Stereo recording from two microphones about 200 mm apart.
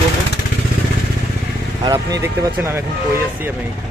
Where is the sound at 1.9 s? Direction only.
15° right (ahead or behind).